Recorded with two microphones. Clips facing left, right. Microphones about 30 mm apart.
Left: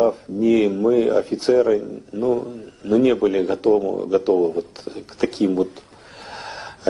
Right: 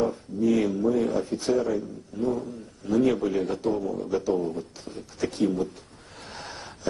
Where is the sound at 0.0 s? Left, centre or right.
Left.